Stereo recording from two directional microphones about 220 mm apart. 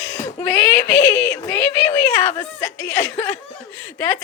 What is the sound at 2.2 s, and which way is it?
Speech, 20° left (ahead or behind).